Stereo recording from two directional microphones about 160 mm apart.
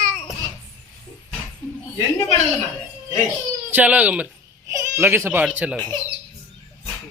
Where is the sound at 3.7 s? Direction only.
10° right (ahead or behind).